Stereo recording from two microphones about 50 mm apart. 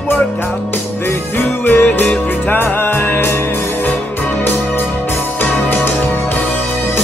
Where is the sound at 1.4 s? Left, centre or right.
Left.